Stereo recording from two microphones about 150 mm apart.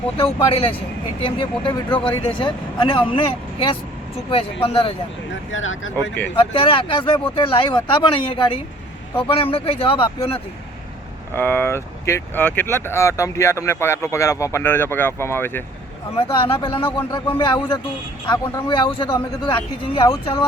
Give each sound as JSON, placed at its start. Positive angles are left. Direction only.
{"t": 0.2, "sound": "speech", "side_deg": 40}
{"t": 6.3, "sound": "speech", "side_deg": 35}
{"t": 11.3, "sound": "speech", "side_deg": 15}
{"t": 16.1, "sound": "speech", "side_deg": 40}